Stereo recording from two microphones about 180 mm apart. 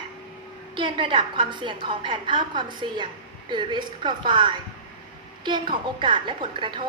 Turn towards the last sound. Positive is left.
turn(degrees=-25)  # may be behind; listen again after turning